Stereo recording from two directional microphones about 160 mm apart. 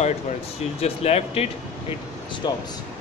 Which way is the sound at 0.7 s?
40° left (ahead or behind).